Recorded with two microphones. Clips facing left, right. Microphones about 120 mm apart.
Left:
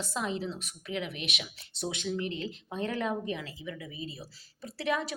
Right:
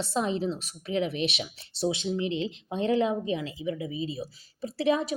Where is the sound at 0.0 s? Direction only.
25° right (ahead or behind).